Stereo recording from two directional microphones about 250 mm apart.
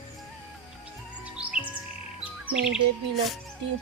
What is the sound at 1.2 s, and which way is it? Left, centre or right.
Music, centre.